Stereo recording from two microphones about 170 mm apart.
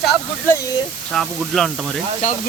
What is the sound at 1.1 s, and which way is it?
Speech, centre (ahead or behind).